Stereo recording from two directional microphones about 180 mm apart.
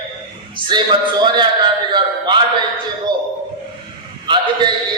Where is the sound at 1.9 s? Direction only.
25° right (ahead or behind).